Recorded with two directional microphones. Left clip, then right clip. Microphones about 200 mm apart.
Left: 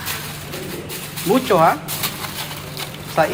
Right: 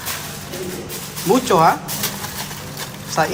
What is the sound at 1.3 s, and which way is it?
Speech, 15° right (ahead or behind).